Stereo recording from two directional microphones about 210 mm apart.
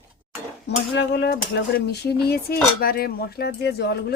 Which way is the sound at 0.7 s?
55° left (ahead or behind).